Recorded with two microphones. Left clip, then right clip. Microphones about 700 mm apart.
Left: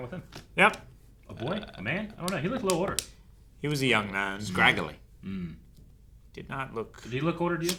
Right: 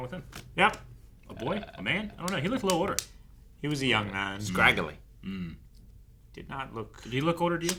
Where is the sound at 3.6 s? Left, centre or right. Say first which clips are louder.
Left 1 dB; right.